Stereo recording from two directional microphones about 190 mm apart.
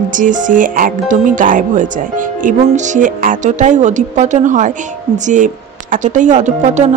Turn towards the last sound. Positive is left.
turn(degrees=-40)  # may be behind; listen again after turning